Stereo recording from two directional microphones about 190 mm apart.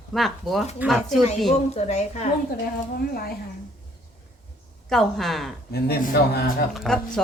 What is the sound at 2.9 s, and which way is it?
Speech, 50° left (ahead or behind).